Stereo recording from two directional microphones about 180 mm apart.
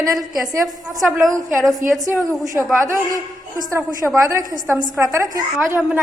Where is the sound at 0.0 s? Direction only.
20° right (ahead or behind).